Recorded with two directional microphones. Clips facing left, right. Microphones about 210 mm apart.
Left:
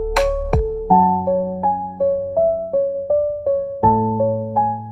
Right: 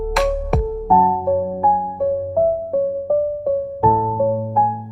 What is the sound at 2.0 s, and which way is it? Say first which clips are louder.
Music: left 3 dB; centre (ahead or behind).